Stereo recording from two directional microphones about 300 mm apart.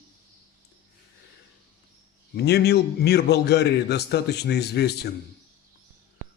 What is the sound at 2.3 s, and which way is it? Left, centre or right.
A man's voice, left.